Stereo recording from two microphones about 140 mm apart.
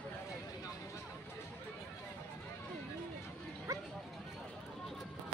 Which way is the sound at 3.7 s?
25° right (ahead or behind).